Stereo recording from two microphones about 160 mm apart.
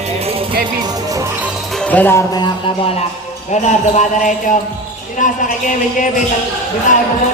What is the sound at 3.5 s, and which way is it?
Speech, 45° left (ahead or behind).